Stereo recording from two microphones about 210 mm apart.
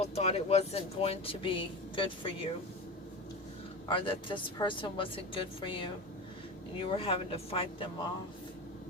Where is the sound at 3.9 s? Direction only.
25° left (ahead or behind).